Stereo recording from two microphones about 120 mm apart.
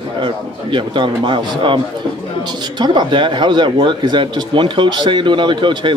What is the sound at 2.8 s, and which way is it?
Speech, 40° right (ahead or behind).